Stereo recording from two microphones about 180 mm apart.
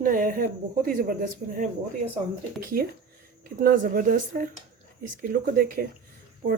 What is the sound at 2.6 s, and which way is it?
Speech, 55° right (ahead or behind).